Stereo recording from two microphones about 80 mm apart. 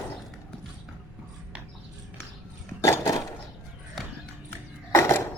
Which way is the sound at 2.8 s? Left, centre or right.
Left.